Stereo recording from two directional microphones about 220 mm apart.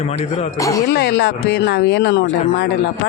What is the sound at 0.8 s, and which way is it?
Speech, 50° left (ahead or behind).